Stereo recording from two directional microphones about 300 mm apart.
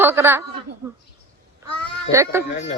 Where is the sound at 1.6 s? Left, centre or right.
Centre.